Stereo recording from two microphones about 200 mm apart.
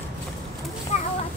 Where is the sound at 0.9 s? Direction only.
35° left (ahead or behind).